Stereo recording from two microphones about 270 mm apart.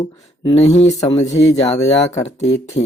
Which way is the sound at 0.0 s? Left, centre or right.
Left.